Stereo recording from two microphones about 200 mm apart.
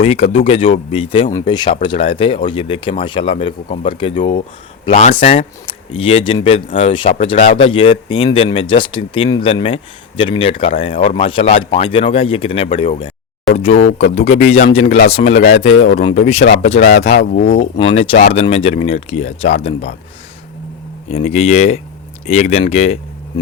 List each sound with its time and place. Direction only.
0.0 s speech: 30° left (ahead or behind)
4.9 s speech: 35° left (ahead or behind)
21.1 s speech: 30° left (ahead or behind)